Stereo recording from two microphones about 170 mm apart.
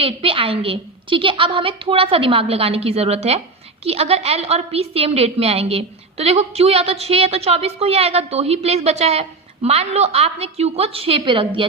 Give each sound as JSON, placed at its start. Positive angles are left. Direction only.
{"t": 0.0, "sound": "a woman's voice", "side_deg": -35}